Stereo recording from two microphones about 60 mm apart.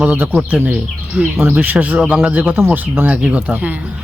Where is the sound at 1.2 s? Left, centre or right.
Right.